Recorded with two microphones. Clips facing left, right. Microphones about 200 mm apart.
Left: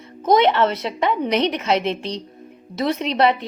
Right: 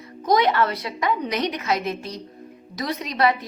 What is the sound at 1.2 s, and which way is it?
Speech, 65° left (ahead or behind).